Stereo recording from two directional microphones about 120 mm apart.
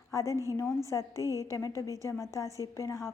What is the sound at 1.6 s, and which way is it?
A woman's voice, 25° left (ahead or behind).